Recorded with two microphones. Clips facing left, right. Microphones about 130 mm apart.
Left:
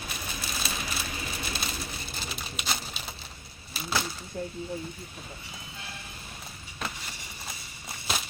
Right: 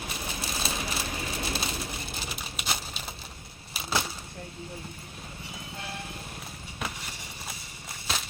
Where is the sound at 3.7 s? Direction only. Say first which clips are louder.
Even; 20° right (ahead or behind).